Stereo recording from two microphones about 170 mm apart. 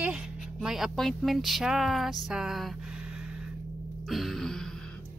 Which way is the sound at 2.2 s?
Centre (ahead or behind).